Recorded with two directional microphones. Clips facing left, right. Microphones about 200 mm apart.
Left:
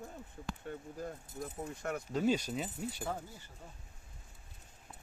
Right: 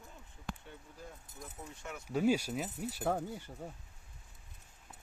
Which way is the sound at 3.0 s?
55° right (ahead or behind).